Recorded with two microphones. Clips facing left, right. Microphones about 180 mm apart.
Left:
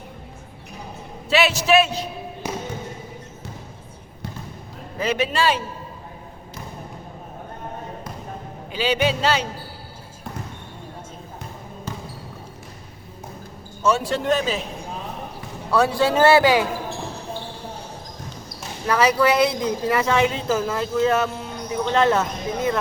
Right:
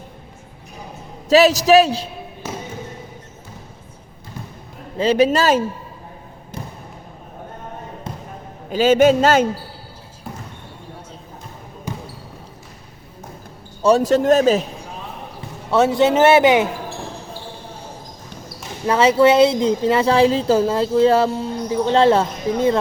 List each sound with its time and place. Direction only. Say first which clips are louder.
1.3 s a man's voice: right 6 dB; 40° right (ahead or behind)
2.4 s music: left 1 dB; 15° left (ahead or behind)
4.9 s a man's voice: right 7 dB; 35° right (ahead or behind)
8.7 s a man's voice: right 9 dB; 45° right (ahead or behind)
13.8 s a man's voice: right 7 dB; 40° right (ahead or behind)
15.7 s speech: right 4 dB; 20° right (ahead or behind)
18.4 s speech: right 4 dB; 25° right (ahead or behind)